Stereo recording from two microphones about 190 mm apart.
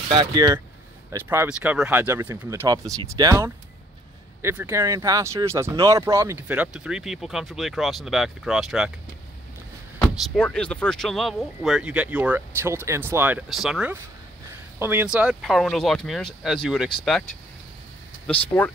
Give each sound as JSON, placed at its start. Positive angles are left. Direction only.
{"t": 0.1, "sound": "speech", "side_deg": -25}
{"t": 10.1, "sound": "speech", "side_deg": 5}
{"t": 18.2, "sound": "speech", "side_deg": 10}